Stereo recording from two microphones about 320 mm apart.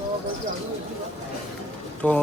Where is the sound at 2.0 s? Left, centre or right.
Centre.